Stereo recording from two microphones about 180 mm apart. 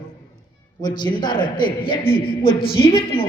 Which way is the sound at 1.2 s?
25° left (ahead or behind).